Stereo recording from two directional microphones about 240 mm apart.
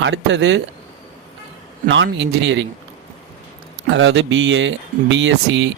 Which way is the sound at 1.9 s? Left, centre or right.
Right.